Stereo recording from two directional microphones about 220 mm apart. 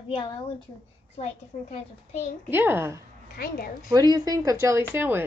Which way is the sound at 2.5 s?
10° right (ahead or behind).